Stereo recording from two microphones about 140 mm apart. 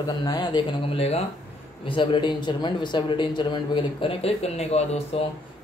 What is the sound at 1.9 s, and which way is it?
Speech, 35° left (ahead or behind).